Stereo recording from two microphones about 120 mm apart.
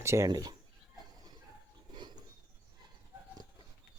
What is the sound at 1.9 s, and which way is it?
Pulleys, 40° right (ahead or behind).